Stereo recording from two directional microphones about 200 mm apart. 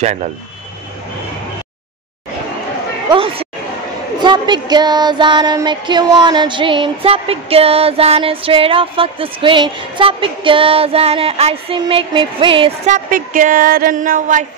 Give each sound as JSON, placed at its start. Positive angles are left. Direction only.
{"t": 0.0, "sound": "speech", "side_deg": -35}
{"t": 3.1, "sound": "speech", "side_deg": -25}
{"t": 4.2, "sound": "music", "side_deg": -20}
{"t": 12.9, "sound": "a sound", "side_deg": -45}